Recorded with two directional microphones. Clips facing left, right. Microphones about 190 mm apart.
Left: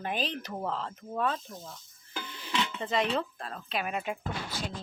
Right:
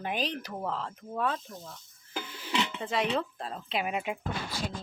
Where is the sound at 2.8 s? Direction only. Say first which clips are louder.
Left 2 dB; 10° right (ahead or behind).